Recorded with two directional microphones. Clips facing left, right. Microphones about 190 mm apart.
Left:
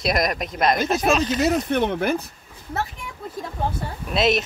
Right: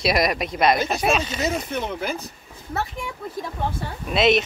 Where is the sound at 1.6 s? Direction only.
65° left (ahead or behind).